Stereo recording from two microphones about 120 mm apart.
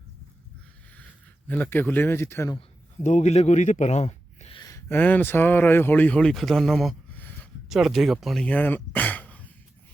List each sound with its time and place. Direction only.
1.5 s speech: 15° left (ahead or behind)
3.0 s a man's voice: 75° left (ahead or behind); by 4.6 s 55° left (ahead or behind)
4.6 s a sound: 25° left (ahead or behind)
4.9 s speech: 15° left (ahead or behind)
7.1 s a sound: 15° left (ahead or behind)
7.7 s speech: centre (ahead or behind)